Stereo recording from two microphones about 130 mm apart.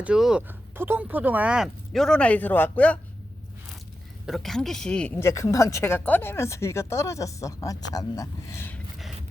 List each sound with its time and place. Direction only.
0.0 s speech: 5° right (ahead or behind); by 3.0 s 10° left (ahead or behind)
4.3 s speech: centre (ahead or behind)
5.2 s speech: 25° left (ahead or behind)